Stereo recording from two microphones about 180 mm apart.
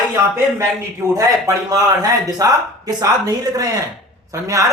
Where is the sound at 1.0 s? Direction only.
15° right (ahead or behind).